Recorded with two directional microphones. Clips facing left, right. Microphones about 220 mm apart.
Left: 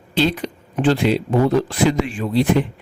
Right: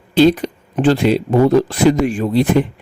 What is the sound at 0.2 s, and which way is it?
A man's voice, 45° right (ahead or behind).